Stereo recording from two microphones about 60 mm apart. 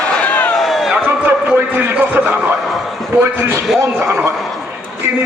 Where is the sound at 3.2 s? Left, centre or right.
Right.